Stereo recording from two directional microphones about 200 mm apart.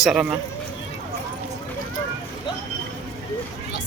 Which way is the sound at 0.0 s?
5° right (ahead or behind).